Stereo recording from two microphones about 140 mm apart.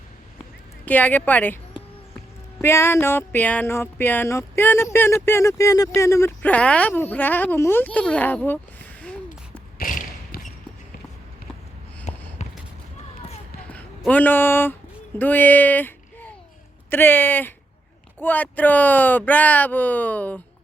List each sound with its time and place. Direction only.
0.9 s speech: 10° left (ahead or behind)
2.6 s speech: 20° left (ahead or behind)
9.7 s thump: 85° left
12.1 s a sound: 55° left (ahead or behind)
14.1 s speech: 10° left (ahead or behind)